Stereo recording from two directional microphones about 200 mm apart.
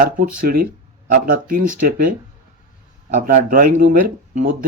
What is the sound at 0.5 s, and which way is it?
Speech, 50° right (ahead or behind).